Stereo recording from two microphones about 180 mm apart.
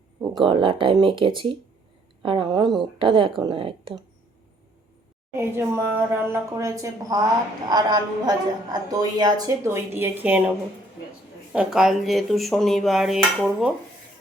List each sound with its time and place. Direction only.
0.2 s a woman's voice: 25° right (ahead or behind)
5.3 s a woman's voice: 15° right (ahead or behind)
11.5 s speech: 5° right (ahead or behind)